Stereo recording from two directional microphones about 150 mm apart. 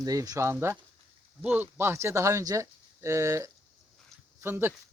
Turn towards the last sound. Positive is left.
turn(degrees=-15)  # may be behind; listen again after turning